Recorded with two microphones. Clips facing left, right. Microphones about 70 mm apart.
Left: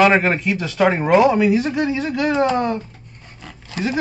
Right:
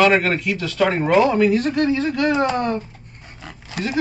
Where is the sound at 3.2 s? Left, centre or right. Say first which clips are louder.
Right 1 dB; centre.